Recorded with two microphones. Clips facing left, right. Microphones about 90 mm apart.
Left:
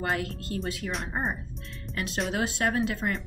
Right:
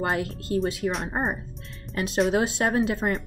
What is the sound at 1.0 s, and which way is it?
Music, 35° right (ahead or behind).